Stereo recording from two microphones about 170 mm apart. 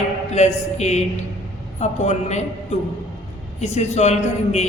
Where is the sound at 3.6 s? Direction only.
40° left (ahead or behind).